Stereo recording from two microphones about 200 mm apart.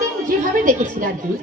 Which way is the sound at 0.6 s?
40° right (ahead or behind).